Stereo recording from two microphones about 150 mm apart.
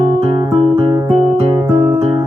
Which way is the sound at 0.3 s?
35° right (ahead or behind).